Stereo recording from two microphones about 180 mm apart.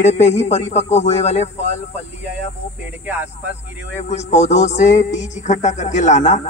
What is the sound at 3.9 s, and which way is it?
Music, 40° left (ahead or behind).